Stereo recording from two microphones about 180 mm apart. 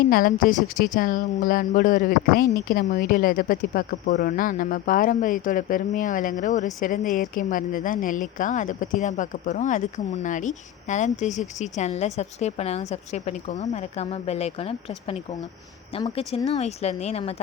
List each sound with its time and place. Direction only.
0.1 s a woman's voice: 50° left (ahead or behind); by 17.3 s 35° left (ahead or behind)